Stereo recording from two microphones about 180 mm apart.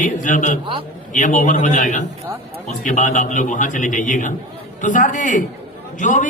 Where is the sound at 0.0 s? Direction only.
45° left (ahead or behind).